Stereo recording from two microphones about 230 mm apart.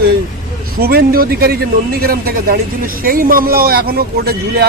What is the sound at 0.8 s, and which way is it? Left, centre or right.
A man's voice, right.